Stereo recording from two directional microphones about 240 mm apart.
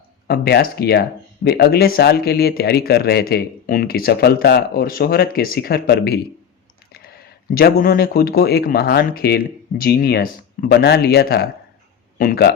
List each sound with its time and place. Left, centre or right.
0.3 s speech: left
7.5 s speech: left